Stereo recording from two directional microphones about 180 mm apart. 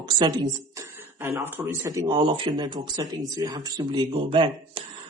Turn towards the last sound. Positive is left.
turn(degrees=-30)  # may be behind; listen again after turning